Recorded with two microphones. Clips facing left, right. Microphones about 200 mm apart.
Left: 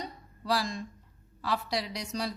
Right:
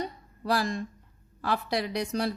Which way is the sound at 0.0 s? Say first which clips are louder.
Right 6 dB; 55° right (ahead or behind).